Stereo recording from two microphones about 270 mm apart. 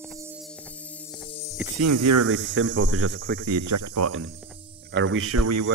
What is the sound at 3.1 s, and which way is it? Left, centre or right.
Speech, right.